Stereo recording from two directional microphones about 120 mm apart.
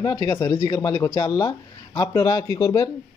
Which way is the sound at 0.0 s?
25° left (ahead or behind).